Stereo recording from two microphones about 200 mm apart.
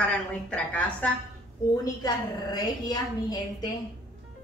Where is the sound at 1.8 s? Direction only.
20° left (ahead or behind).